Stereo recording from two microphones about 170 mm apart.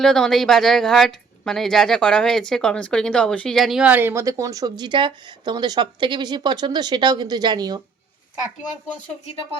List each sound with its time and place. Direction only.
0.0 s a woman's voice: 5° left (ahead or behind); by 7.8 s 25° right (ahead or behind)